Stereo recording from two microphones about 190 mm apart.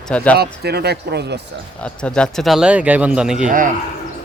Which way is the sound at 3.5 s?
45° right (ahead or behind).